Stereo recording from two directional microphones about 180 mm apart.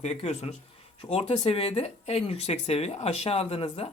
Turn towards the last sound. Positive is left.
turn(degrees=35)  # may be behind; listen again after turning